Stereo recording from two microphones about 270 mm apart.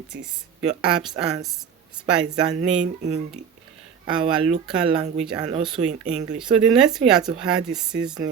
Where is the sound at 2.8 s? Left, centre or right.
Right.